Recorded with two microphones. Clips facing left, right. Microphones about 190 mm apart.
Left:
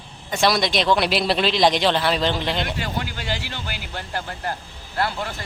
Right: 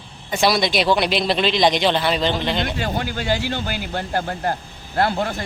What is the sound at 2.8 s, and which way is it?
Speech, 50° right (ahead or behind).